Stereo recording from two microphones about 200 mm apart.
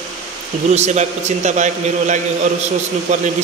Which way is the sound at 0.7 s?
35° right (ahead or behind).